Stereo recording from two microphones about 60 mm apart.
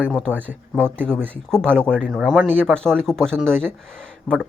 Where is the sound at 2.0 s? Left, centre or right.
Centre.